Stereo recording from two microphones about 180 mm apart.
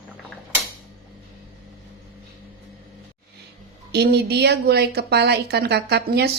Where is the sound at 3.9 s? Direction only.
65° right (ahead or behind).